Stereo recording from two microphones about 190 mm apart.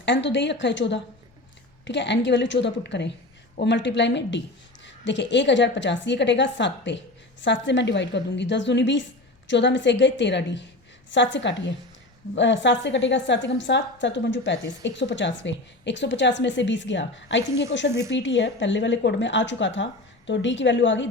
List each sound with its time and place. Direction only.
0.0 s a woman's voice: 70° left (ahead or behind)